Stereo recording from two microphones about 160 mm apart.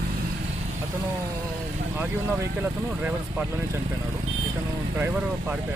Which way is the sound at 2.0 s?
15° right (ahead or behind).